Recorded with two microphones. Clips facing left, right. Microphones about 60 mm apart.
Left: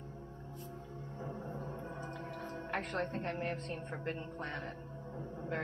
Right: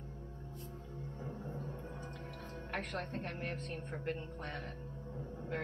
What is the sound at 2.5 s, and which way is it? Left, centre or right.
A woman's voice, centre.